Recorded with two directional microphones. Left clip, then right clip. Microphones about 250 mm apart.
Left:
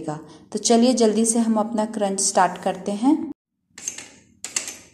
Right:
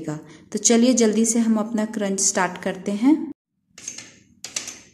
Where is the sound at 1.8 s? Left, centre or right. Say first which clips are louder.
Left 1 dB; right.